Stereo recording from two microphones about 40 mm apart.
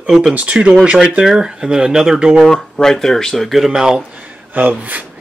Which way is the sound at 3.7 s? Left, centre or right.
Centre.